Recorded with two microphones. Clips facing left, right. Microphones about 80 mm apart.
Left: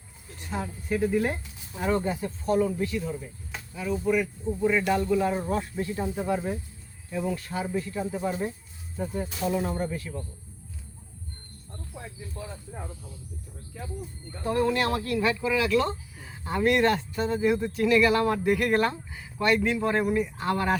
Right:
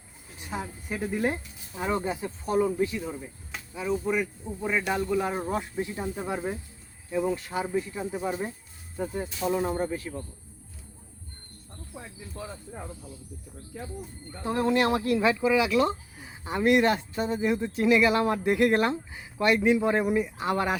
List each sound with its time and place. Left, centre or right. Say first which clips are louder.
0.3 s speech: left 2 dB; centre
14.4 s speech: right 1 dB; centre